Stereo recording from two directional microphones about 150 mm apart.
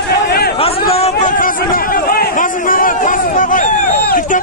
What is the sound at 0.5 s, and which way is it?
Chatter, 40° left (ahead or behind).